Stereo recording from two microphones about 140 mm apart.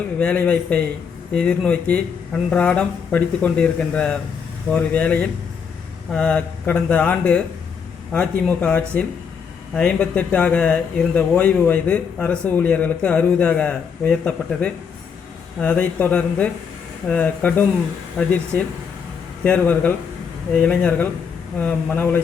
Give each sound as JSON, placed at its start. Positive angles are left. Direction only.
{"t": 0.2, "sound": "speech", "side_deg": 10}
{"t": 19.5, "sound": "speech", "side_deg": 10}